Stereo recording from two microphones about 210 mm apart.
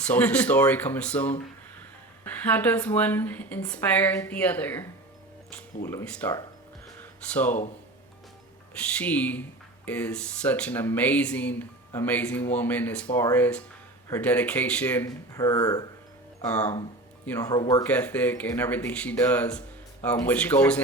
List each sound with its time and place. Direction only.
0.0 s a woman's voice: 5° left (ahead or behind)
7.0 s music: 10° left (ahead or behind)
9.0 s a woman's voice: 5° left (ahead or behind)
17.8 s a woman's voice: 5° left (ahead or behind)